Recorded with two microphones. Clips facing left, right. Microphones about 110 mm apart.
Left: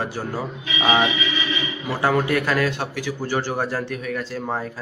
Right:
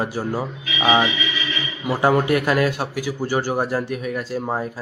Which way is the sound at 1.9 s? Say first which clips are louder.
Right 3 dB; 15° right (ahead or behind).